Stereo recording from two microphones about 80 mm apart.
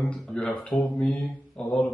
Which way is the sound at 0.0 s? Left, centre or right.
Centre.